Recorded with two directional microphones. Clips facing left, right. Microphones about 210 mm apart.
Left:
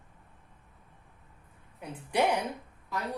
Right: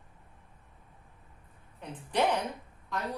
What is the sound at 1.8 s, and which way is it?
Speech, 10° left (ahead or behind).